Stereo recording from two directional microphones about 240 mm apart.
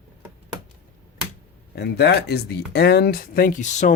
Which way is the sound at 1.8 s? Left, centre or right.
Left.